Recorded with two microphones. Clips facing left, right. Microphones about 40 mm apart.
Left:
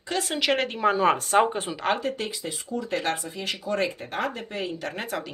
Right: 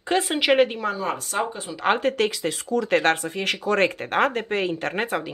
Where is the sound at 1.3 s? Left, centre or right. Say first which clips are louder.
Left 5 dB; left.